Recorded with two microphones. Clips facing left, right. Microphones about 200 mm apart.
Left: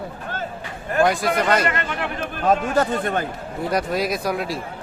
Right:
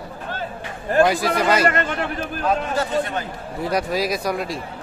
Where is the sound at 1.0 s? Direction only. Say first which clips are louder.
Left 1 dB; centre (ahead or behind).